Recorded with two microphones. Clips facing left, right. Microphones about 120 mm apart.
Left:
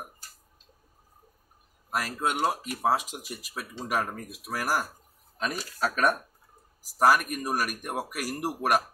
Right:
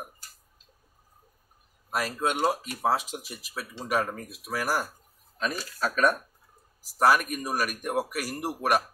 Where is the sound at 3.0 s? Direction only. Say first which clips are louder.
Right 1 dB; 50° left (ahead or behind).